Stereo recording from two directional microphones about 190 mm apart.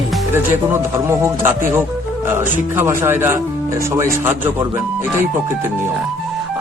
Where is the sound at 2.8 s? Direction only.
10° right (ahead or behind).